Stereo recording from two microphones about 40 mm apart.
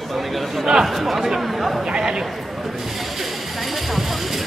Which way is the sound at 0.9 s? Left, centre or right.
Centre.